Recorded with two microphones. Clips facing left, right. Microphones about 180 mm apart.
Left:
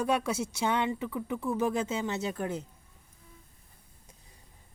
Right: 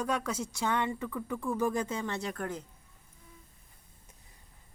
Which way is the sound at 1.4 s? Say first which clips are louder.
Left 1 dB; 5° left (ahead or behind).